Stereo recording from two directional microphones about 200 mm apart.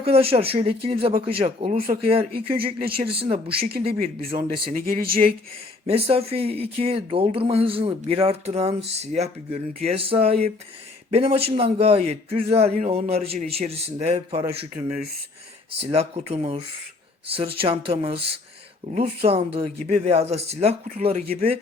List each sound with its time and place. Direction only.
0.0 s a man's voice: 30° right (ahead or behind)
3.6 s speech: 50° right (ahead or behind)
4.4 s speech: 25° right (ahead or behind)
4.7 s speech: 45° right (ahead or behind)
5.8 s a man's voice: 30° right (ahead or behind)
15.8 s a man's voice: 30° right (ahead or behind)